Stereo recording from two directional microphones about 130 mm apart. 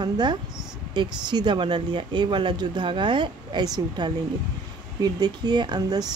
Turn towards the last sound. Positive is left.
turn(degrees=-35)  # may be behind; listen again after turning